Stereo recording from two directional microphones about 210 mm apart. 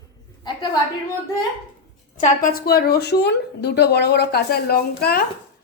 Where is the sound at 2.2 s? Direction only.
40° left (ahead or behind).